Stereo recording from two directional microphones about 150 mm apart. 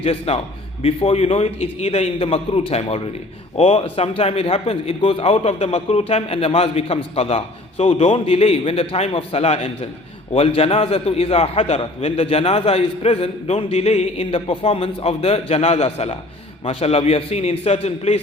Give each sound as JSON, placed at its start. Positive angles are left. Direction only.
{"t": 0.0, "sound": "a man's voice", "side_deg": 45}